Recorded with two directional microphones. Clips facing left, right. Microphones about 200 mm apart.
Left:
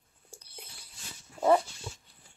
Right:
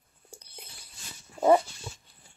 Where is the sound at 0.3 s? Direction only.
20° right (ahead or behind).